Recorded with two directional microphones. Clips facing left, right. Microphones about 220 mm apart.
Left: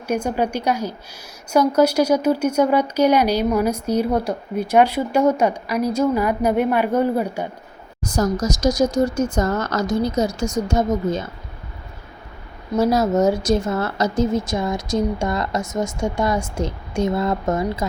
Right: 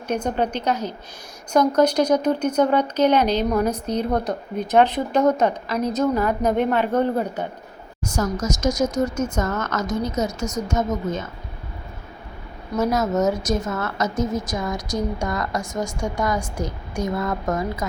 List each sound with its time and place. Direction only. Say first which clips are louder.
0.1 s speech: left 2 dB; 10° left (ahead or behind)
8.0 s speech: left 3 dB; 35° left (ahead or behind)
12.7 s a woman's voice: left 4 dB; 35° left (ahead or behind)